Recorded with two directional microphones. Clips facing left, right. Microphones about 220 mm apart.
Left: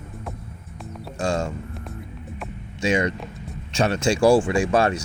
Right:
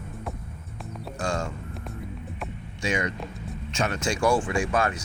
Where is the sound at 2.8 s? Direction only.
25° left (ahead or behind).